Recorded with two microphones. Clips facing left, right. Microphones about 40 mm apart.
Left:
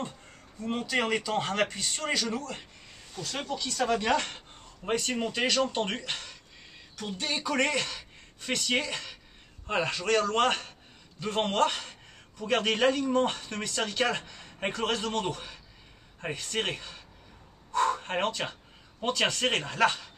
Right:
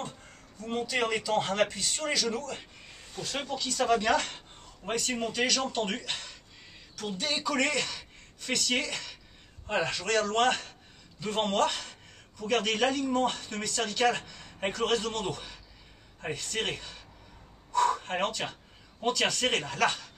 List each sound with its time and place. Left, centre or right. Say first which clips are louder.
0.7 s speech: even; centre
3.2 s speech: even; centre
3.7 s speech: right 1 dB; centre
7.0 s a sound: right 1 dB; centre
7.5 s a man's voice: left 3 dB; centre